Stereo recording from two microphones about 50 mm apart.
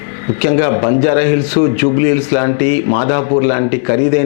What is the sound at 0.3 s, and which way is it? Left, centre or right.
A man's voice, centre.